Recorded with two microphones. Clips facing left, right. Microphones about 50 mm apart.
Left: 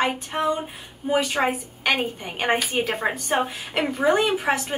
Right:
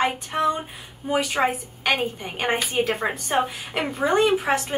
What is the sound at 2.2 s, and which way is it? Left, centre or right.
Speech, centre.